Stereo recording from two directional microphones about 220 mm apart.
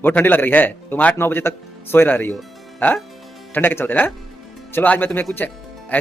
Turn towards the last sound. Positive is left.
turn(degrees=10)  # may be behind; listen again after turning